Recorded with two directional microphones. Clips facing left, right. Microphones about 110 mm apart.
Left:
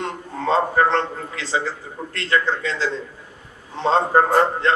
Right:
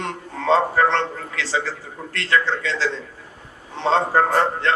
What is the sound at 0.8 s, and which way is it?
Speech, 35° left (ahead or behind).